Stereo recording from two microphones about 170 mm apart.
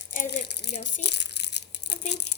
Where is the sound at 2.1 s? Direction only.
85° left.